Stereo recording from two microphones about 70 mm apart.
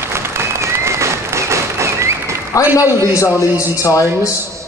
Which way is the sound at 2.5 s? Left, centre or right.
Left.